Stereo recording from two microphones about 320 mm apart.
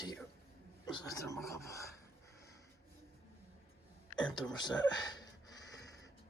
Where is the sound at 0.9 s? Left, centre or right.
Centre.